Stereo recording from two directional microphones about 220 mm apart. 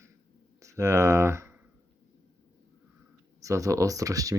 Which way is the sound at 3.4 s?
15° right (ahead or behind).